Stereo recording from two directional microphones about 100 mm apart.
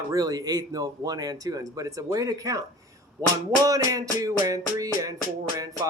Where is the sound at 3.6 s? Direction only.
35° right (ahead or behind).